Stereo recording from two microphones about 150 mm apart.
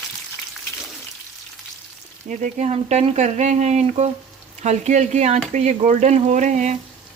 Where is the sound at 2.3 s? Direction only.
50° right (ahead or behind).